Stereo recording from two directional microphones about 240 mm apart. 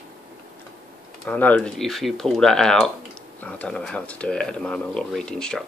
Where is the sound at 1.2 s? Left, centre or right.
Centre.